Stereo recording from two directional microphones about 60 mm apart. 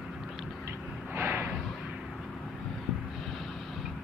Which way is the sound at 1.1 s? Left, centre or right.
Right.